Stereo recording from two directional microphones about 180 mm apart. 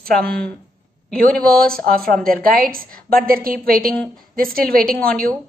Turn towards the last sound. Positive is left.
turn(degrees=-55)  # may be behind; listen again after turning